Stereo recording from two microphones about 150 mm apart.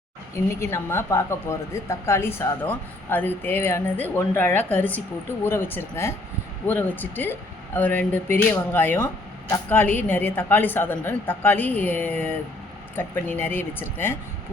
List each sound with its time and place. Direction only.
0.6 s a woman's voice: 15° left (ahead or behind)